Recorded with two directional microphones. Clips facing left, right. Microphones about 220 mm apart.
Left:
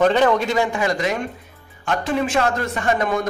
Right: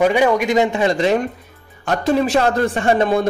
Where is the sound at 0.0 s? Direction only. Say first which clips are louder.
Right 1 dB; 10° right (ahead or behind); by 1.1 s 25° right (ahead or behind).